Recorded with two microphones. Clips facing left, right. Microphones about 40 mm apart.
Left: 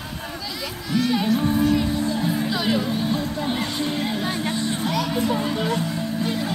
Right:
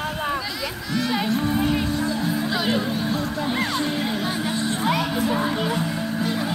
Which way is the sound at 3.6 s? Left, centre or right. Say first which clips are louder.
Right 1 dB; centre.